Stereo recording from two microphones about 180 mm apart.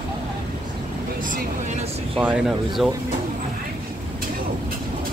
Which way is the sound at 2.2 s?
5° right (ahead or behind).